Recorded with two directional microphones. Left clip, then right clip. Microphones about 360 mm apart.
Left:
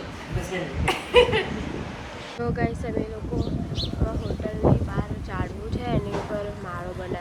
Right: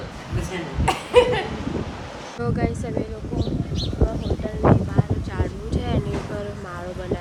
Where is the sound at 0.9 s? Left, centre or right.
Right.